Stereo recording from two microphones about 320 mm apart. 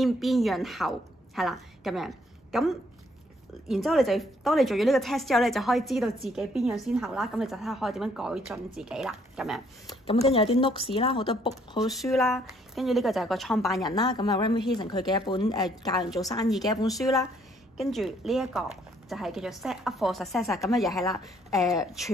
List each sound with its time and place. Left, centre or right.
0.0 s a woman's voice: centre
9.8 s speech: centre
11.8 s a woman's voice: centre
13.8 s speech: centre
17.7 s a woman's voice: centre
20.9 s speech: centre